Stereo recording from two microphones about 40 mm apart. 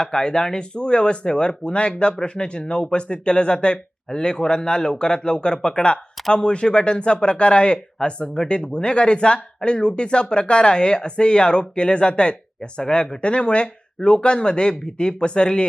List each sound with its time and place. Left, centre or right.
0.0 s speech: centre